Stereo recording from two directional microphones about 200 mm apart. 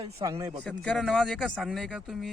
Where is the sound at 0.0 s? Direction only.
15° right (ahead or behind).